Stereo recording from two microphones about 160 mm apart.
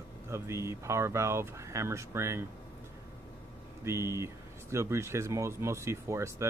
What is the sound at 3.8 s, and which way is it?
Speech, 15° right (ahead or behind).